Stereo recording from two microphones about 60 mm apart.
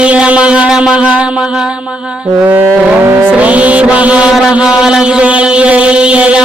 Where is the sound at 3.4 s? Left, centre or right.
Right.